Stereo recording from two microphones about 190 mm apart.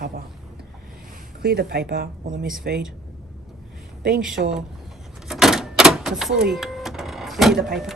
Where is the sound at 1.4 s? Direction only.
55° right (ahead or behind).